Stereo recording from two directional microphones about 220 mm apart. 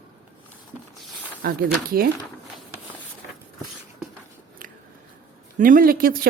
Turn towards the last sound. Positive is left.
turn(degrees=-40)  # may be behind; listen again after turning